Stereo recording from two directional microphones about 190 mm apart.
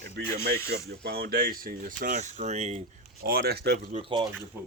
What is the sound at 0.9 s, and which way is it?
Speech, 55° right (ahead or behind).